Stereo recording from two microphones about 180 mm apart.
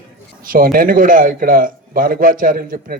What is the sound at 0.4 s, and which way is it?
A man's voice, 50° right (ahead or behind).